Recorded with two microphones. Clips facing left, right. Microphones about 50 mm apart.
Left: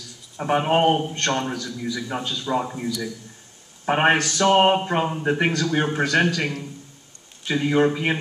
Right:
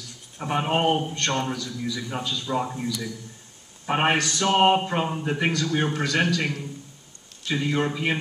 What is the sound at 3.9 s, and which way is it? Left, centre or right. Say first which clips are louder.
Speech: left 3 dB; left.